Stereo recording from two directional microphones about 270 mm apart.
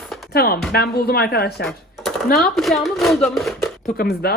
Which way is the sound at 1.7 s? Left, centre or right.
Centre.